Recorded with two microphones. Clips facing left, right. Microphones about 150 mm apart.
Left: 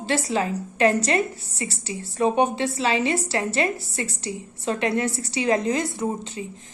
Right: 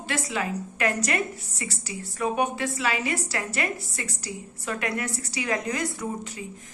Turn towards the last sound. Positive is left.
turn(degrees=25)  # may be behind; listen again after turning